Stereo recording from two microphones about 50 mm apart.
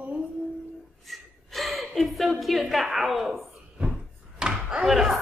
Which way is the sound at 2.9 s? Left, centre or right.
Centre.